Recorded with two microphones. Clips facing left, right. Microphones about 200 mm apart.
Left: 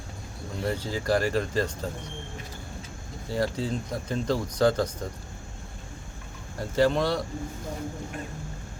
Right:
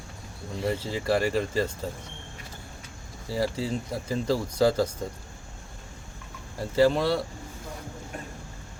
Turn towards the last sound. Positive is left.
turn(degrees=-5)  # may be behind; listen again after turning